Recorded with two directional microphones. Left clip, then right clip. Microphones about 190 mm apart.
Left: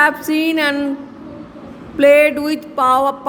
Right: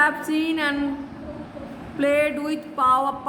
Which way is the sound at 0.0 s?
40° left (ahead or behind).